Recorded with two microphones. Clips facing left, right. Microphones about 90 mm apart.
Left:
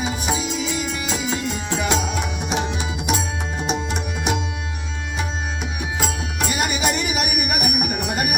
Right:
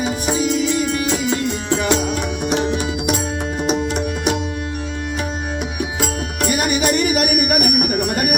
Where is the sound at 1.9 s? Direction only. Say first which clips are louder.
Right 3 dB; centre (ahead or behind).